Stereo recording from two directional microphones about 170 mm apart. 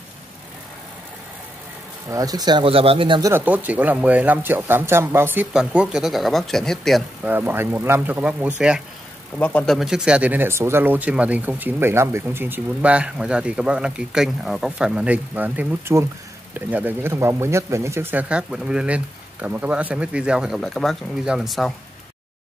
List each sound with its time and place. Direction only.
2.0 s speech: 20° right (ahead or behind)
3.2 s speech: 15° right (ahead or behind); by 7.0 s centre (ahead or behind)
7.2 s speech: 10° right (ahead or behind)
9.4 s speech: 10° left (ahead or behind)